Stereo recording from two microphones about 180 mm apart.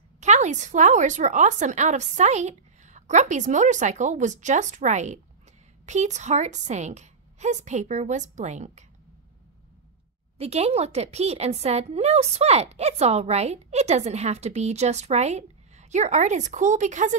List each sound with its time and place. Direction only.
0.2 s a woman's voice: 40° right (ahead or behind)
10.3 s a woman's voice: 35° right (ahead or behind)